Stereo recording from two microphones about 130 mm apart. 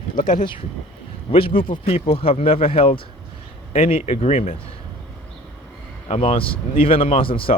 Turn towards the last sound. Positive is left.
turn(degrees=45)  # may be behind; listen again after turning